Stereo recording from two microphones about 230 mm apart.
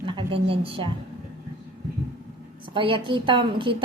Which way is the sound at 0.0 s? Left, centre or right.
Right.